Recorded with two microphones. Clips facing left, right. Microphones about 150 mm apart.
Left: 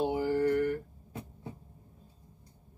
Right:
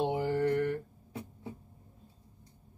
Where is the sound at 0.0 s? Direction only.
20° right (ahead or behind).